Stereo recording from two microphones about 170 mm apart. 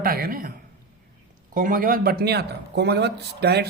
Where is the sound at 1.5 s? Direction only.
55° right (ahead or behind).